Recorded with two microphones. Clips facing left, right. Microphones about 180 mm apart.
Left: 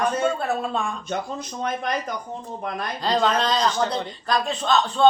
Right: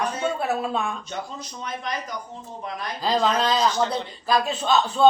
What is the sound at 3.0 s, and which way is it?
A man's voice, 5° right (ahead or behind).